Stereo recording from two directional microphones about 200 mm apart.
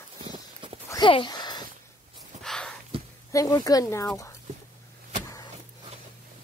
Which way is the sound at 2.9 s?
30° right (ahead or behind).